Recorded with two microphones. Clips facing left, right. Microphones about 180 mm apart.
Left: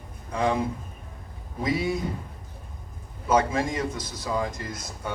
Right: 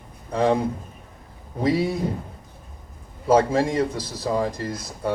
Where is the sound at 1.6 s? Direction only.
30° right (ahead or behind).